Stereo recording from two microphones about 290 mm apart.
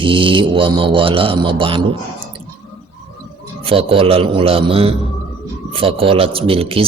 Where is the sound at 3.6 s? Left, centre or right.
Centre.